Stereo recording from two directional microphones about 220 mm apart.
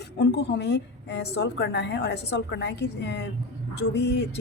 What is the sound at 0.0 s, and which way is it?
A woman's voice, 50° left (ahead or behind).